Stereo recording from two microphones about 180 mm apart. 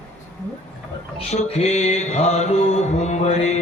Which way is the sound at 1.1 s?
35° left (ahead or behind).